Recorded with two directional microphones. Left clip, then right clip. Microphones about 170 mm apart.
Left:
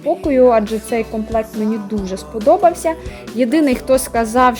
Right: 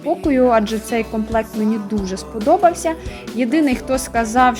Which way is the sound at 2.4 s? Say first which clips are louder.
Left 2 dB; 20° left (ahead or behind).